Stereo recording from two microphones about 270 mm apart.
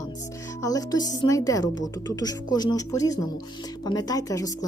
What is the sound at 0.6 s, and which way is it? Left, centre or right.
Speech, centre.